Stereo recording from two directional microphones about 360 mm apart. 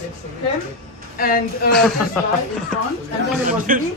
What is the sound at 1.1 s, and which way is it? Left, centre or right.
Speech, left.